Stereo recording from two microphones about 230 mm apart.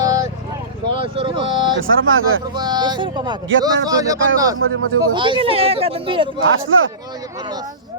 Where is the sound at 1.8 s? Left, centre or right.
Right.